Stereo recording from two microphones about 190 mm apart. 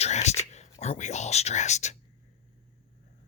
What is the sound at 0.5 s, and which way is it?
Whispering, 35° left (ahead or behind).